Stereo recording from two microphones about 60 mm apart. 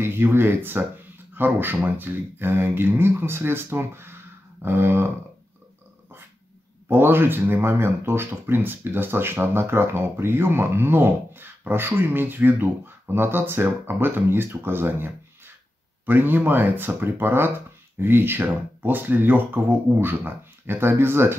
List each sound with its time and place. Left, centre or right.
0.0 s speech: right
6.9 s speech: right